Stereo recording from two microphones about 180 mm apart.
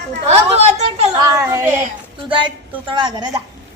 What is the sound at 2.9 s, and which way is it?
Speech, 25° right (ahead or behind).